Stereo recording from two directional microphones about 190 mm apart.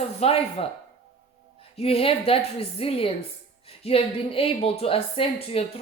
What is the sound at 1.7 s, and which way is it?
Speech, 30° left (ahead or behind).